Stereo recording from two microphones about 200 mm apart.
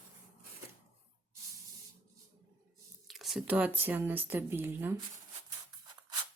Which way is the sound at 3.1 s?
Centre (ahead or behind).